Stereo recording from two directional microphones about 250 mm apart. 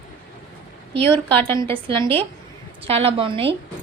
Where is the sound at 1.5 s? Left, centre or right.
Right.